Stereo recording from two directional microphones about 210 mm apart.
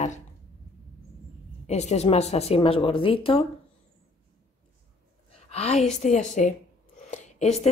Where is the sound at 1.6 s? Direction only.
30° left (ahead or behind).